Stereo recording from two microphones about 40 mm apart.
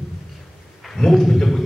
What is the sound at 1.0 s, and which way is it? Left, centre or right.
Speech, centre.